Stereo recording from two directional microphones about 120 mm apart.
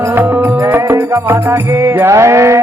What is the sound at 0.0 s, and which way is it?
Music, 20° right (ahead or behind).